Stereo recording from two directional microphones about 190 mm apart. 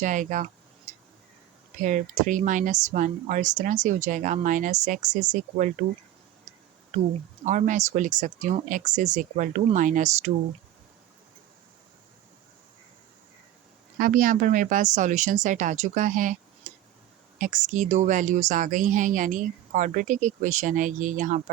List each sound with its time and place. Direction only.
0.0 s speech: 45° right (ahead or behind)
0.9 s a sound: 40° right (ahead or behind)
1.8 s speech: 40° right (ahead or behind)
7.4 s speech: 40° right (ahead or behind)
14.0 s speech: 45° right (ahead or behind)
16.7 s tick-tock: 40° right (ahead or behind)
17.3 s speech: 40° right (ahead or behind)